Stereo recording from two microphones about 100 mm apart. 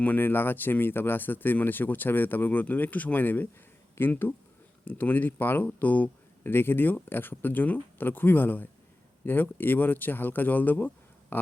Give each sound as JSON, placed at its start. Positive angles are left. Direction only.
{"t": 0.0, "sound": "speech", "side_deg": 20}